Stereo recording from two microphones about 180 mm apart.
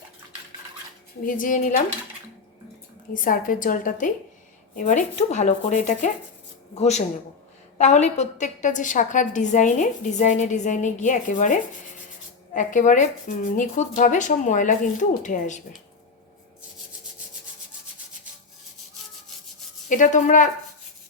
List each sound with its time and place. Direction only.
1.2 s a woman's voice: 50° left (ahead or behind)
3.1 s a woman's voice: 50° left (ahead or behind)
19.9 s a woman's voice: 45° left (ahead or behind)